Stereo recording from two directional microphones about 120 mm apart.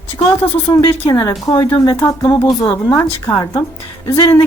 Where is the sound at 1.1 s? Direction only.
30° left (ahead or behind).